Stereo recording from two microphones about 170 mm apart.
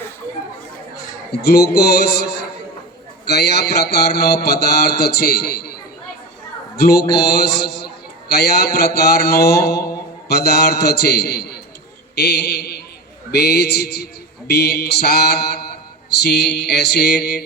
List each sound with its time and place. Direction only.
1.4 s mantra: 70° left (ahead or behind)
6.7 s speech: 65° left (ahead or behind)
7.2 s mantra: 70° left (ahead or behind)